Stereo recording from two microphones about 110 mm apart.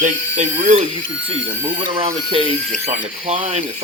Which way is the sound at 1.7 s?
55° right (ahead or behind).